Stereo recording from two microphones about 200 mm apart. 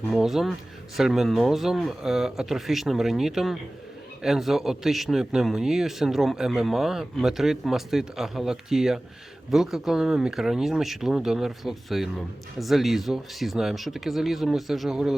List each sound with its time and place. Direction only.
0.1 s speech: centre (ahead or behind)